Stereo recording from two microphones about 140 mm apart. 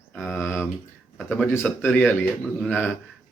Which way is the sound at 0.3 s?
15° left (ahead or behind).